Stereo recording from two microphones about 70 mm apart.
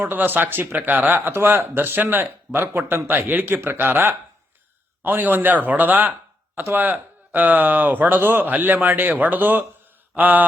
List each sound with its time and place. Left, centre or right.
0.0 s a man's voice: right